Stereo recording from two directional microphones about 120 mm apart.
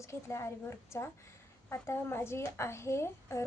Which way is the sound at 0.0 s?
25° left (ahead or behind).